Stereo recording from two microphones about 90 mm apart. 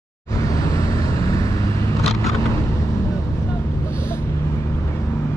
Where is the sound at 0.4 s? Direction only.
40° left (ahead or behind).